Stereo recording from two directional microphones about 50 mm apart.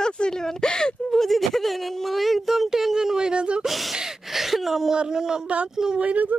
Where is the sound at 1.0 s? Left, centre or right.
Centre.